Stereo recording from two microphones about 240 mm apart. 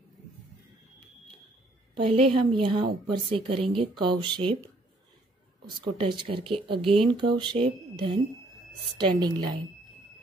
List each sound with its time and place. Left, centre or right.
2.2 s a woman's voice: right
5.8 s a woman's voice: centre